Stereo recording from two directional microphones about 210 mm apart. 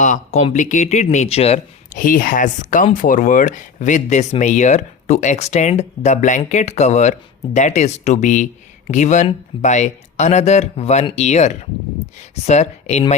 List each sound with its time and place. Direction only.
0.0 s speech: 35° left (ahead or behind)